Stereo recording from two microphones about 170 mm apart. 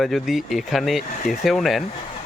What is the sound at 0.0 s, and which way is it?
Speech, centre (ahead or behind).